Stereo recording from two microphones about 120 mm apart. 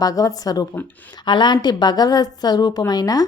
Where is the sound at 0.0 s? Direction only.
30° left (ahead or behind).